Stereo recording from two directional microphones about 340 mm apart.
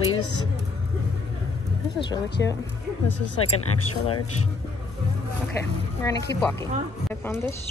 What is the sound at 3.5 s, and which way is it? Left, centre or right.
Speech, left.